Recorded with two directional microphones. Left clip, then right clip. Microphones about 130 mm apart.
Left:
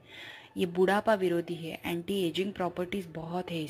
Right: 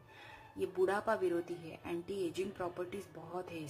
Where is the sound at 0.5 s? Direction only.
30° left (ahead or behind).